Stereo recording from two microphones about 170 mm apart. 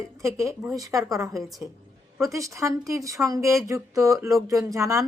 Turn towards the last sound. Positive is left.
turn(degrees=-15)  # may be behind; listen again after turning